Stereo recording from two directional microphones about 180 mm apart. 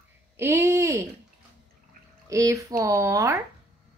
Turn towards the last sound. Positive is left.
turn(degrees=-15)  # may be behind; listen again after turning